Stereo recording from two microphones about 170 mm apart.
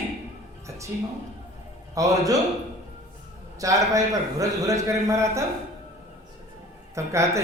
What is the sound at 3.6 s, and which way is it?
A man's voice, 20° right (ahead or behind).